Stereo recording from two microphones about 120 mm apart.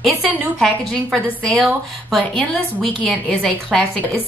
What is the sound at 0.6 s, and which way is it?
A woman's voice, 5° left (ahead or behind).